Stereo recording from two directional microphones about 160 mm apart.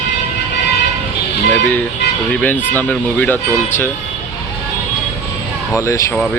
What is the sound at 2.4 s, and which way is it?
Speech, 10° left (ahead or behind).